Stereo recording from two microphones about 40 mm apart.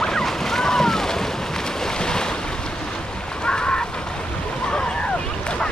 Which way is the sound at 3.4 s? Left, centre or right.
Left.